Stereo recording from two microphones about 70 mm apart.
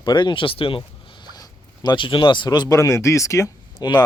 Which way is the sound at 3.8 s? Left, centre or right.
Left.